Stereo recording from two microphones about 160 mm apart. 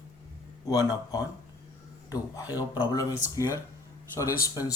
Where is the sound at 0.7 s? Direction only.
25° left (ahead or behind).